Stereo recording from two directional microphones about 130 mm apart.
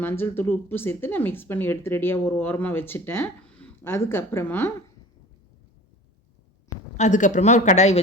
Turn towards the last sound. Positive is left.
turn(degrees=60)  # may be behind; listen again after turning